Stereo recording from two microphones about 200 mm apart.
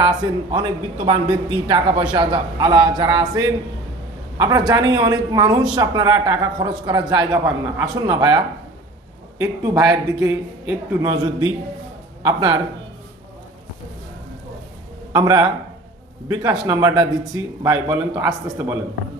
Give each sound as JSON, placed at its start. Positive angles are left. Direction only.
{"t": 0.0, "sound": "a man's voice", "side_deg": -20}
{"t": 15.1, "sound": "speech", "side_deg": -20}
{"t": 16.6, "sound": "a man's voice", "side_deg": -20}